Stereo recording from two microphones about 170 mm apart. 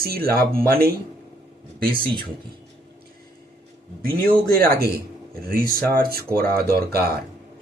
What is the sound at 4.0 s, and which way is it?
Speech, 60° right (ahead or behind).